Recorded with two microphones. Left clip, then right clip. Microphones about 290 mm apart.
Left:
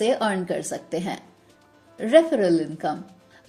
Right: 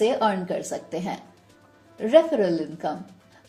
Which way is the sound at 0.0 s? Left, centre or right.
Left.